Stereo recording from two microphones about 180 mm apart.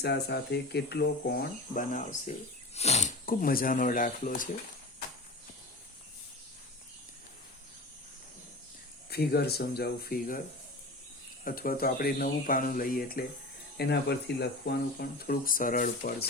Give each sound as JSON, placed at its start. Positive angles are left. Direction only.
{"t": 0.0, "sound": "speech", "side_deg": 65}
{"t": 3.2, "sound": "speech", "side_deg": 55}
{"t": 9.0, "sound": "speech", "side_deg": 60}
{"t": 11.4, "sound": "speech", "side_deg": 50}
{"t": 13.7, "sound": "speech", "side_deg": 65}